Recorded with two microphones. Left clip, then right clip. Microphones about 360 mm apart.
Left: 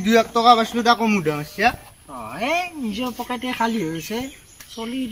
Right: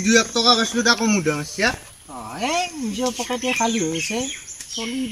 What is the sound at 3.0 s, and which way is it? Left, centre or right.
Speech, centre.